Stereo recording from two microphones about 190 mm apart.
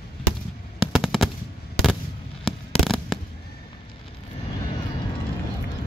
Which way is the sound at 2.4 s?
Centre (ahead or behind).